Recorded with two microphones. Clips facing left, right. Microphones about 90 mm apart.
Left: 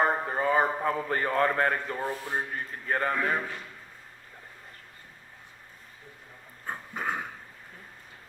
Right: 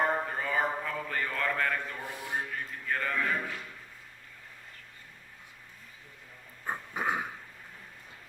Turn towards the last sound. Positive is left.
turn(degrees=-5)  # may be behind; listen again after turning